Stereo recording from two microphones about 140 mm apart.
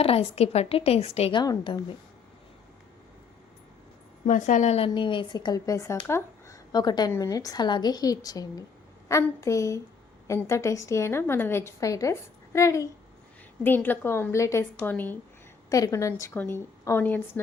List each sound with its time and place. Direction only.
0.0 s a woman's voice: 45° left (ahead or behind)
1.4 s a woman's voice: 30° left (ahead or behind)
4.3 s a woman's voice: 65° left (ahead or behind)
4.9 s a woman's voice: 35° left (ahead or behind); by 15.2 s 15° left (ahead or behind)
15.7 s a woman's voice: 25° left (ahead or behind)